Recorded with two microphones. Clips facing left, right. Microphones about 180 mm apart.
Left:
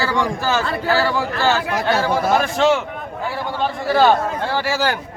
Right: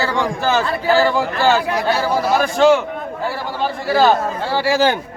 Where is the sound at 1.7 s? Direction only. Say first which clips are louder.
Right 1 dB; 50° left (ahead or behind).